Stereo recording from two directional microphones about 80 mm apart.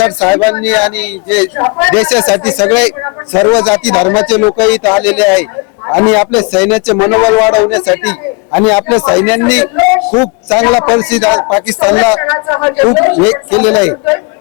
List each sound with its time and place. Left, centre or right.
0.0 s speech: centre